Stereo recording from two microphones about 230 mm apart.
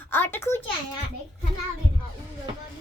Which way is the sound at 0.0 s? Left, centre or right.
Centre.